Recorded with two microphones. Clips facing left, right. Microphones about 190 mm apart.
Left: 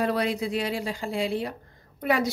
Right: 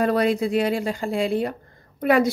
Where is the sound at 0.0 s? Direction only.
50° right (ahead or behind).